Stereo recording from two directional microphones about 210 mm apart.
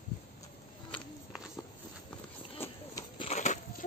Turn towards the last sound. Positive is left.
turn(degrees=35)  # may be behind; listen again after turning